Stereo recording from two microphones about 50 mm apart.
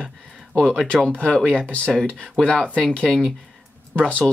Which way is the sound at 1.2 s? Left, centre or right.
Centre.